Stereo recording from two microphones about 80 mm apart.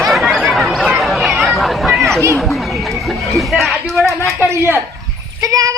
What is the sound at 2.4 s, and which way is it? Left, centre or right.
A man's voice, centre.